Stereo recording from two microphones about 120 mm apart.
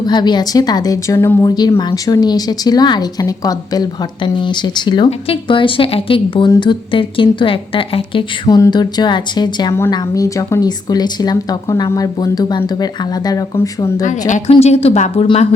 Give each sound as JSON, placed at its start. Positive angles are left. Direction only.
{"t": 0.0, "sound": "a woman's voice", "side_deg": 35}
{"t": 8.4, "sound": "speech", "side_deg": 30}
{"t": 14.0, "sound": "a woman's voice", "side_deg": 90}
{"t": 14.5, "sound": "speech", "side_deg": 60}